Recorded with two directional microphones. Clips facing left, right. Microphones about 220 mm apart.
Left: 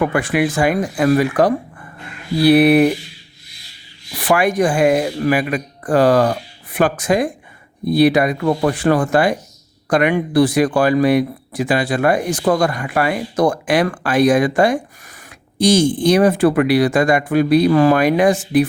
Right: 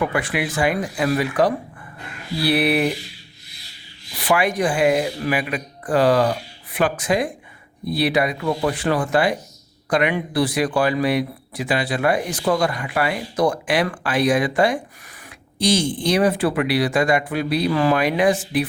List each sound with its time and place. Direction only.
0.0 s speech: 50° left (ahead or behind)
4.3 s speech: 45° left (ahead or behind)